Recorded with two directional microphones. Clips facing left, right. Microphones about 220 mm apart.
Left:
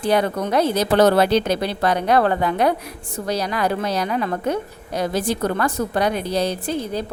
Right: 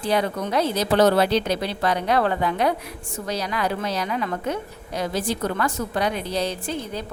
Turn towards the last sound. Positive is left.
turn(degrees=40)  # may be behind; listen again after turning